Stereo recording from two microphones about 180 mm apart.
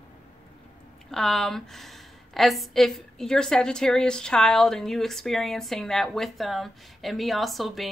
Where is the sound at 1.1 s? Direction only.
Centre (ahead or behind).